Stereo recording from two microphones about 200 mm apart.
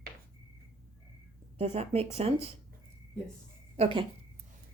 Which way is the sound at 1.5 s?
30° right (ahead or behind).